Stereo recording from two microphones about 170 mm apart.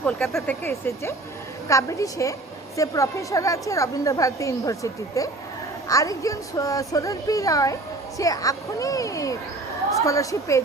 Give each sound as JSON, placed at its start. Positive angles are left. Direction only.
{"t": 0.0, "sound": "speech", "side_deg": 5}
{"t": 0.6, "sound": "a woman's voice", "side_deg": 15}